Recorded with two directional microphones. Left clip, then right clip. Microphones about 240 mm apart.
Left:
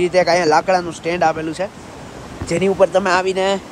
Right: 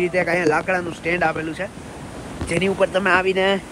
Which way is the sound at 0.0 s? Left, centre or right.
Centre.